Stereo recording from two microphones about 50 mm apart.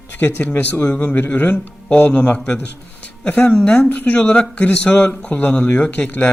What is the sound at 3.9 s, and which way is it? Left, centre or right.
Speech, left.